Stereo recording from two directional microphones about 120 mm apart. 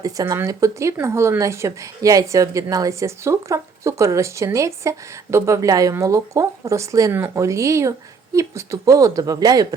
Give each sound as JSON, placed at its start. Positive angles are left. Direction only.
{"t": 0.0, "sound": "speech", "side_deg": -30}